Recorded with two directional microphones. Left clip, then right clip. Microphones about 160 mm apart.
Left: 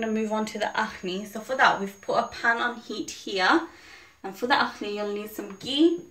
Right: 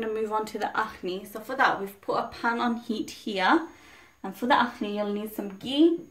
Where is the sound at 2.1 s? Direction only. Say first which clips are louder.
Left 4 dB; 80° right; by 3.6 s 55° right (ahead or behind).